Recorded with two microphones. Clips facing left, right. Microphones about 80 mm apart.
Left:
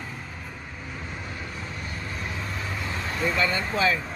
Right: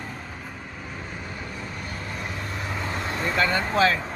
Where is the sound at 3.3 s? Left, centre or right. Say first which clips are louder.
Right 7 dB; right.